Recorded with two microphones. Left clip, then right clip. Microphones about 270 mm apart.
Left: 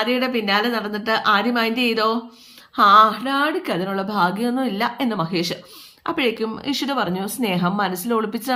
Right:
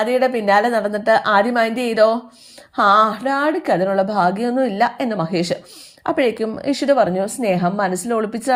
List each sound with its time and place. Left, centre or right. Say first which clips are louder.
0.0 s speech: right 4 dB; centre